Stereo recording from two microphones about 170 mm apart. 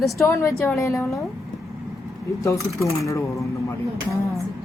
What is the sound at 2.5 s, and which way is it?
Speech, 20° left (ahead or behind).